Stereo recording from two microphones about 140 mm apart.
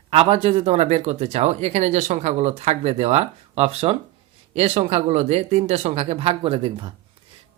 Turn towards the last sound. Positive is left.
turn(degrees=-40)  # may be behind; listen again after turning